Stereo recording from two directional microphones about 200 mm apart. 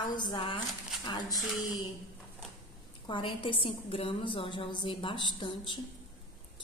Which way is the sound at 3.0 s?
25° left (ahead or behind).